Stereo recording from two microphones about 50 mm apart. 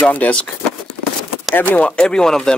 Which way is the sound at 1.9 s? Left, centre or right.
Centre.